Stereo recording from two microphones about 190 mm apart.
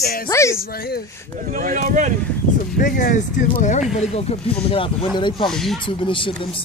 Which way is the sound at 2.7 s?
50° left (ahead or behind).